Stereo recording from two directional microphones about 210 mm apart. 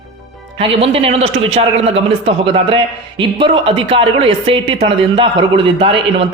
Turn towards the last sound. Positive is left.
turn(degrees=-25)  # may be behind; listen again after turning